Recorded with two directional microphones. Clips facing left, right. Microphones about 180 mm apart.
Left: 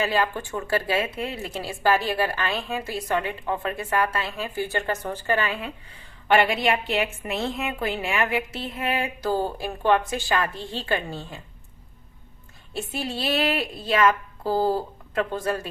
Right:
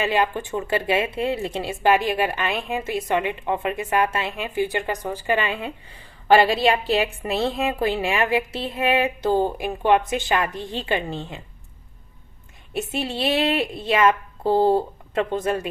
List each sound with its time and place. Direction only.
0.1 s speech: 20° right (ahead or behind)
12.7 s speech: 25° right (ahead or behind)